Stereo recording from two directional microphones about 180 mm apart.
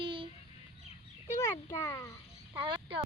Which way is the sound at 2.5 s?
25° right (ahead or behind).